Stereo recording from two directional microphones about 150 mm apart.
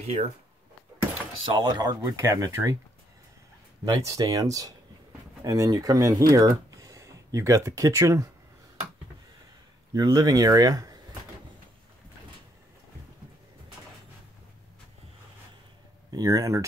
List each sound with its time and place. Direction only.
0.0 s speech: 50° right (ahead or behind)
1.5 s speech: 30° right (ahead or behind)
3.8 s speech: 25° right (ahead or behind)
9.9 s speech: 25° right (ahead or behind)
16.1 s speech: 20° right (ahead or behind)